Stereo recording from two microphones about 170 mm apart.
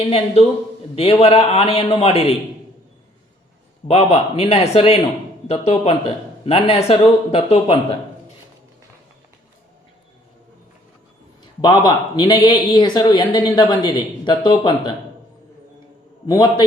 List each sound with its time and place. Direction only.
1.2 s speech: 35° left (ahead or behind)
3.8 s speech: 40° left (ahead or behind)
11.6 s speech: 25° left (ahead or behind)
16.2 s speech: 25° left (ahead or behind)